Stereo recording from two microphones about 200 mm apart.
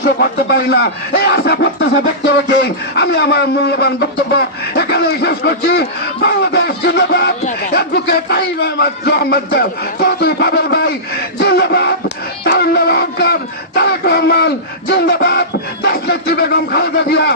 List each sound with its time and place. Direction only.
0.0 s speech: 55° left (ahead or behind)